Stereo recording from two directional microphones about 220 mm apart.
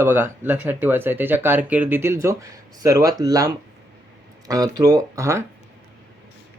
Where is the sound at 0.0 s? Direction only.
10° right (ahead or behind).